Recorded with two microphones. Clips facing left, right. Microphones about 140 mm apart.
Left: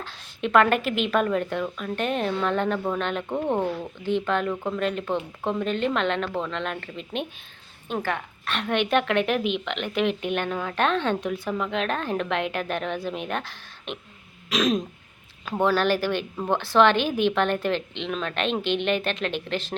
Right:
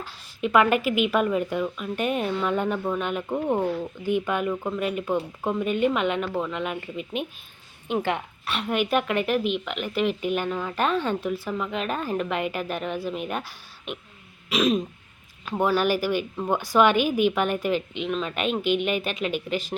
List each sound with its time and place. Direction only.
0.0 s speech: 5° right (ahead or behind)
8.0 s a woman's voice: 15° right (ahead or behind)
8.5 s a woman's voice: 5° right (ahead or behind)